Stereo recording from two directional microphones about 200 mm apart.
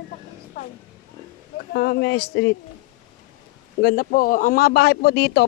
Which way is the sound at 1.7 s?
55° left (ahead or behind).